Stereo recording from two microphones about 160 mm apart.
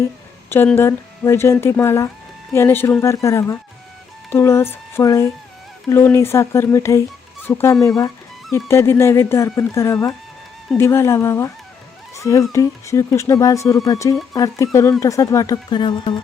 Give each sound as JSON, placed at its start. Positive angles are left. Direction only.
{"t": 0.5, "sound": "speech", "side_deg": 15}